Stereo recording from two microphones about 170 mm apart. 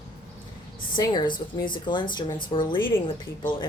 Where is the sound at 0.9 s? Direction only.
25° left (ahead or behind).